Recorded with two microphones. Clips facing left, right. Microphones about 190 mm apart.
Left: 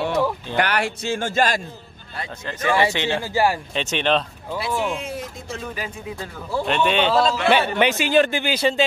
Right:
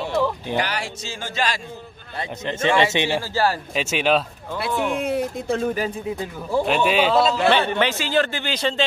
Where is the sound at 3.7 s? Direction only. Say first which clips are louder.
Right 1 dB; 5° right (ahead or behind).